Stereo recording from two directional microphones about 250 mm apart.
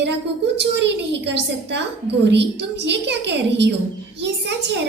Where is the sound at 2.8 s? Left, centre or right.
Right.